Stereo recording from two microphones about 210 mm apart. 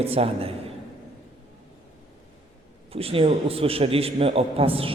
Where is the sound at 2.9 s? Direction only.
25° right (ahead or behind).